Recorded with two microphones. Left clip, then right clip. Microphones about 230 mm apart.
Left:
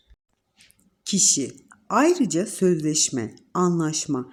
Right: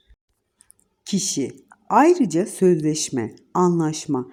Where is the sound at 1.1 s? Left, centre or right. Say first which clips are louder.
Left 3 dB; centre.